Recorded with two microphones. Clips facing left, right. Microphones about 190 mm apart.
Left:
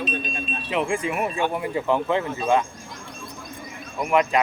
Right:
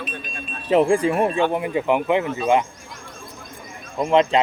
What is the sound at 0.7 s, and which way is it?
Speech, 35° right (ahead or behind).